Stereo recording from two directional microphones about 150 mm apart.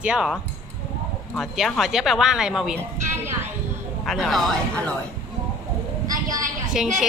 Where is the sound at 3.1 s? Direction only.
15° right (ahead or behind).